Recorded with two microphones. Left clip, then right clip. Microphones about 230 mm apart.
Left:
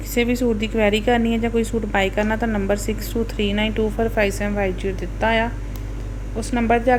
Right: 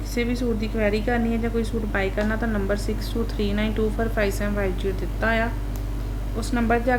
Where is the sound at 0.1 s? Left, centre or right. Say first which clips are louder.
Left 6 dB; centre.